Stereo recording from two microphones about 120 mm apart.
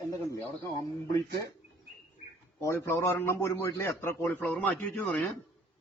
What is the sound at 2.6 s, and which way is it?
A man's voice, 20° left (ahead or behind).